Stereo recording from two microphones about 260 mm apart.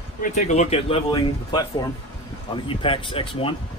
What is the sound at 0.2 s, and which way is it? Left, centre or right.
Speech, left.